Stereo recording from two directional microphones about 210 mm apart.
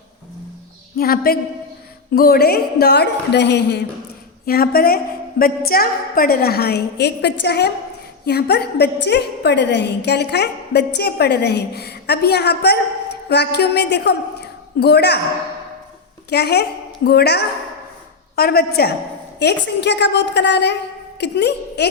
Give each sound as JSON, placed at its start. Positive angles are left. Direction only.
{"t": 0.9, "sound": "a woman's voice", "side_deg": 45}
{"t": 16.3, "sound": "a woman's voice", "side_deg": 50}